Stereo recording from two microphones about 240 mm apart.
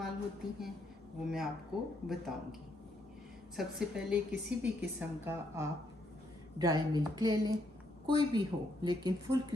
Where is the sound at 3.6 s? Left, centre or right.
Centre.